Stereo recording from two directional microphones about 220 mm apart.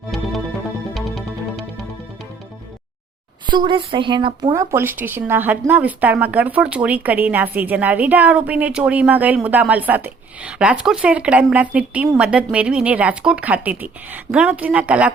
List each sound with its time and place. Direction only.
0.9 s music: centre (ahead or behind)
3.4 s a woman's voice: 20° right (ahead or behind)
4.7 s speech: 10° right (ahead or behind)